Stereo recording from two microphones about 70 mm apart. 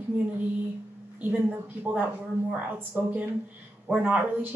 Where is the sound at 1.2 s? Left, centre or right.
Right.